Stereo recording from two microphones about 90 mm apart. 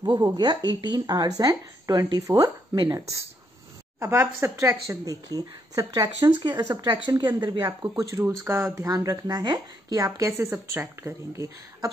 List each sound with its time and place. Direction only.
0.0 s speech: 50° right (ahead or behind)
7.6 s speech: 35° right (ahead or behind)
8.8 s speech: 40° right (ahead or behind)
10.3 s a woman's voice: 25° right (ahead or behind)